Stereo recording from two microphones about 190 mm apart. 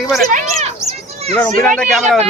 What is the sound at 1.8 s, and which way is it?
Speech, centre (ahead or behind).